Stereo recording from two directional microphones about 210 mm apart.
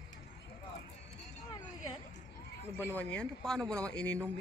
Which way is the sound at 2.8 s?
10° left (ahead or behind).